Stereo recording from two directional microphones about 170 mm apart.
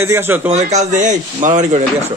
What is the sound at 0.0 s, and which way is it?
Speech, 15° right (ahead or behind).